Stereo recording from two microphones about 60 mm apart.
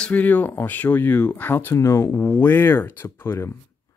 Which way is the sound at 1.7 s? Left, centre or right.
Left.